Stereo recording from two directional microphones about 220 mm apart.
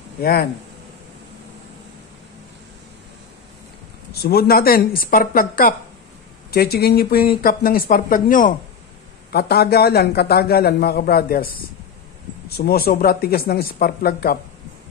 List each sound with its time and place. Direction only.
0.2 s a man's voice: 45° left (ahead or behind)
4.1 s a man's voice: 45° left (ahead or behind)